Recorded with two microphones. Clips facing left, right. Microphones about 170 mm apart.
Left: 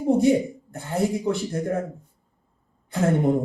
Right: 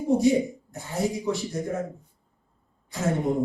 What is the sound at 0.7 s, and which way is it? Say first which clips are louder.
A man's voice: left 6 dB; 55° left (ahead or behind).